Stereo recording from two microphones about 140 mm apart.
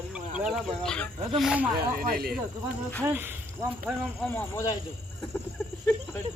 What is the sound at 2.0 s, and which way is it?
Speech, 90° right.